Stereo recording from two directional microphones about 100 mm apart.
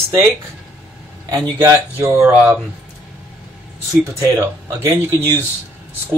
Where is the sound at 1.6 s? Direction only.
25° right (ahead or behind).